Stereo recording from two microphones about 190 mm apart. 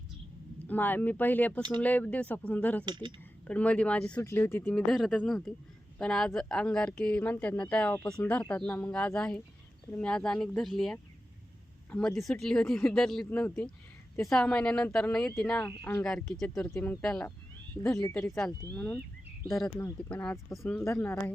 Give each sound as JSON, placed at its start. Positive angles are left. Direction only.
{"t": 0.7, "sound": "speech", "side_deg": 10}
{"t": 2.8, "sound": "speech", "side_deg": -25}
{"t": 3.4, "sound": "speech", "side_deg": 5}
{"t": 4.7, "sound": "a woman's voice", "side_deg": 0}